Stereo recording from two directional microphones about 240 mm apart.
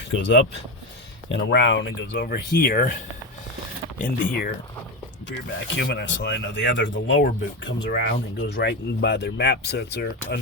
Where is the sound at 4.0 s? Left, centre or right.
Left.